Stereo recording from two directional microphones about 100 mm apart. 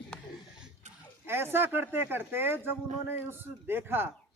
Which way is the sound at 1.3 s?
25° right (ahead or behind).